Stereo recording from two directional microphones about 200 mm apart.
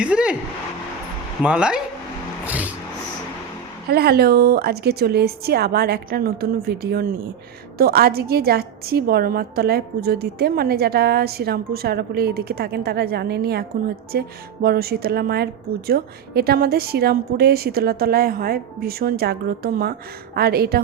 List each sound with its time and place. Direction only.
0.0 s speech: 5° right (ahead or behind)
1.4 s speech: 5° right (ahead or behind)
3.8 s a woman's voice: 50° right (ahead or behind)